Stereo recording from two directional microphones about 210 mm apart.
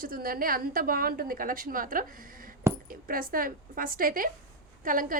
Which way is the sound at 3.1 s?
40° right (ahead or behind).